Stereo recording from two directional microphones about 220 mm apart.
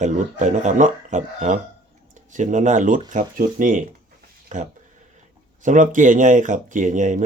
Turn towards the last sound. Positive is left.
turn(degrees=-35)  # may be behind; listen again after turning